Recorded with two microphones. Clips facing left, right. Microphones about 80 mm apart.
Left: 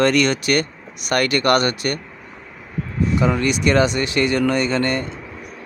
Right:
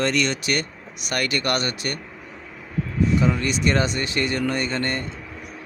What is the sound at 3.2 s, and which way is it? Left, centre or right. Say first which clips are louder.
Speech: left 3 dB; left.